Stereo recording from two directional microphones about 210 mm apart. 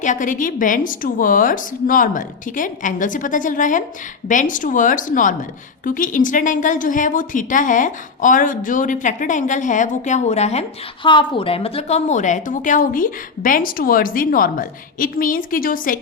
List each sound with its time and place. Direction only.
0.0 s a woman's voice: 35° left (ahead or behind)